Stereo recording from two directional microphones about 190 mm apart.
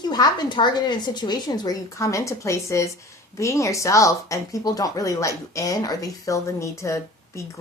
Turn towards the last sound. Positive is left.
turn(degrees=15)  # may be behind; listen again after turning